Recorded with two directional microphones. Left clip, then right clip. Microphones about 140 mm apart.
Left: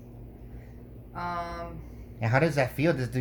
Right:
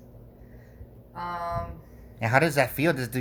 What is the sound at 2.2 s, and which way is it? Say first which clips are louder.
Speech: right 3 dB; 50° right (ahead or behind).